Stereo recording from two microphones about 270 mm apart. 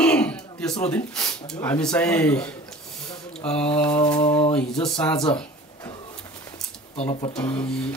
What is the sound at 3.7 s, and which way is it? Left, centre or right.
Speech, centre.